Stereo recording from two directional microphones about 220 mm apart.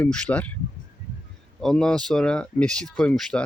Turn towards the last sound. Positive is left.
turn(degrees=5)  # may be behind; listen again after turning